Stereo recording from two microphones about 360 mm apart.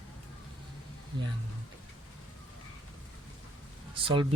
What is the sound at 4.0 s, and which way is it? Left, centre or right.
Speech, centre.